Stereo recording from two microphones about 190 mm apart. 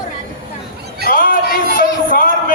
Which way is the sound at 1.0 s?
45° left (ahead or behind).